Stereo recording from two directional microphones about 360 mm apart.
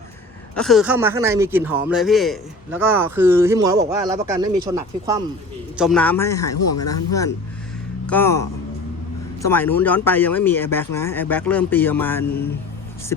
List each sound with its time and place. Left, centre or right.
0.5 s speech: centre
6.5 s speech: left
6.7 s speech: centre